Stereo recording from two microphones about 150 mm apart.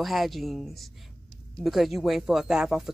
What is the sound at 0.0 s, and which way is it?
Speech, centre (ahead or behind).